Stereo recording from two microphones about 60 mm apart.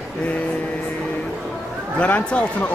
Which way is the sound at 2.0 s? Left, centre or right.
Centre.